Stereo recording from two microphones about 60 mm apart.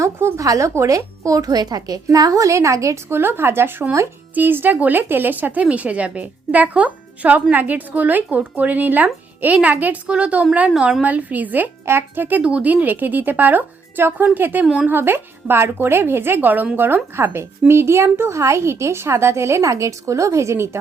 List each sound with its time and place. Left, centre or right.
0.0 s a woman's voice: right
0.4 s speech: right
2.1 s a woman's voice: right
3.1 s speech: right
11.9 s speech: right
12.4 s speech: right
14.6 s speech: centre
14.8 s speech: right